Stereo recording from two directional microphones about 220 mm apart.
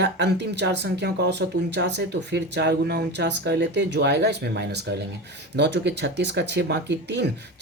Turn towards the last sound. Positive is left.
turn(degrees=-50)  # may be behind; listen again after turning